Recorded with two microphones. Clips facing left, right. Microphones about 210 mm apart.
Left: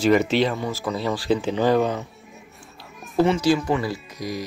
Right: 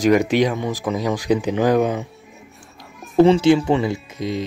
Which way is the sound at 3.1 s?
25° right (ahead or behind).